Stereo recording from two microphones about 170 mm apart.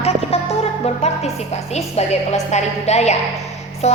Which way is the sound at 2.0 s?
40° left (ahead or behind).